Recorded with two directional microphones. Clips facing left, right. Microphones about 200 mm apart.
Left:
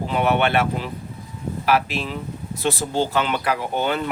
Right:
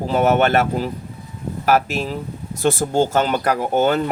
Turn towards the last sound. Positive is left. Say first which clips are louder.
# right 5 dB
turn(degrees=-45)  # may be behind; listen again after turning